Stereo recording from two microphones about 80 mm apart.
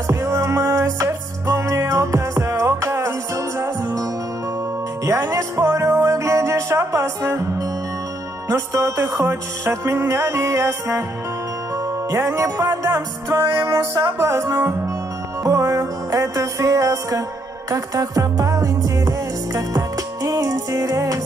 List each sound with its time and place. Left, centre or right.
0.0 s music: right